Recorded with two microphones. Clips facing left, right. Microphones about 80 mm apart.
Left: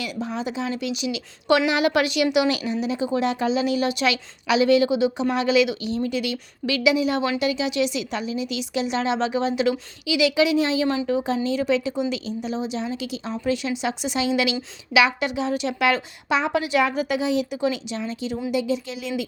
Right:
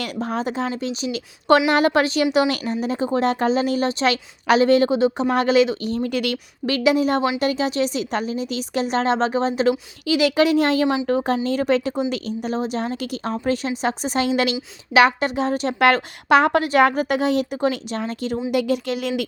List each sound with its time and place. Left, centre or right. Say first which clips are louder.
0.0 s a woman's voice: right 3 dB; right